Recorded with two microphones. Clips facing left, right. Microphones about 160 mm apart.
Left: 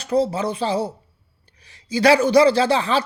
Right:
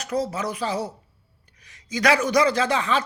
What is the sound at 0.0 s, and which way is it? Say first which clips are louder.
Speech: left 6 dB; 30° left (ahead or behind).